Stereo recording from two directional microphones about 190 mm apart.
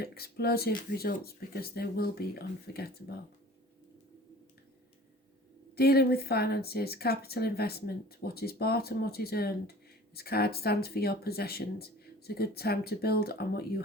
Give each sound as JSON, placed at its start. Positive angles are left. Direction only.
{"t": 0.0, "sound": "speech", "side_deg": 55}
{"t": 5.7, "sound": "speech", "side_deg": 55}